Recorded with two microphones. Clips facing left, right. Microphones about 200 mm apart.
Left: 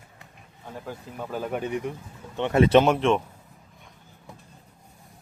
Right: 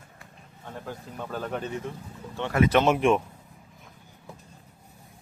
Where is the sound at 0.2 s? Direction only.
10° left (ahead or behind); by 2.8 s 25° left (ahead or behind).